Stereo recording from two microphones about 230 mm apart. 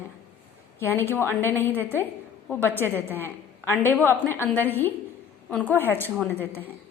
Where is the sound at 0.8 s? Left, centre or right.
Centre.